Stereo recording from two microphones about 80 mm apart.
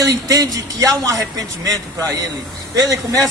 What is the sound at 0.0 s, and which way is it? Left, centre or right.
Speech, right.